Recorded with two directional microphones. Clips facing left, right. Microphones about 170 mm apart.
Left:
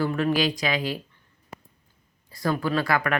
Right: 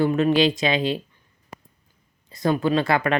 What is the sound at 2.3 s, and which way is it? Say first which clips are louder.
Speech: right 4 dB; 20° right (ahead or behind).